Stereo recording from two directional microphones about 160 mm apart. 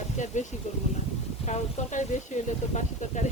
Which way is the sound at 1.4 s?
45° left (ahead or behind).